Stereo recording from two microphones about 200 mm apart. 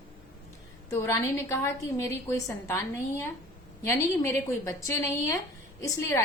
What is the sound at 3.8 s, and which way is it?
A woman's voice, 15° left (ahead or behind).